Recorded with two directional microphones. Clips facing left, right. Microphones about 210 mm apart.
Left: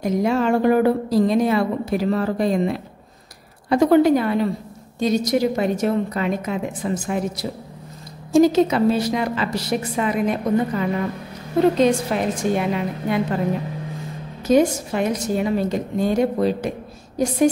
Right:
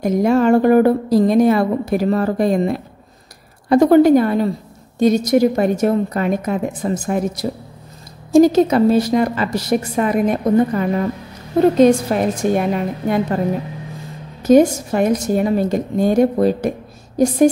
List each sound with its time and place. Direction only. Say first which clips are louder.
0.0 s a woman's voice: right 5 dB; 45° right (ahead or behind)
14.5 s a woman's voice: right 5 dB; 45° right (ahead or behind)